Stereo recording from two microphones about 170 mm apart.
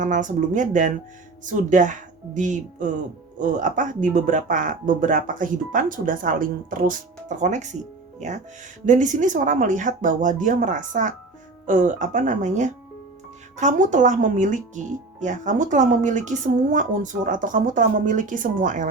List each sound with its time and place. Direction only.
0.0 s speech: 50° right (ahead or behind)
8.9 s speech: 45° right (ahead or behind)